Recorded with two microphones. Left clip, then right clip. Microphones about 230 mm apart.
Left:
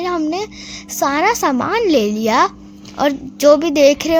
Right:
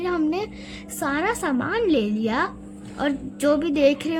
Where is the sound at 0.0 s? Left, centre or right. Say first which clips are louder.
Left 5 dB; centre.